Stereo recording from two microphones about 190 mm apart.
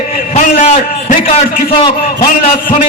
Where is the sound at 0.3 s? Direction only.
35° left (ahead or behind).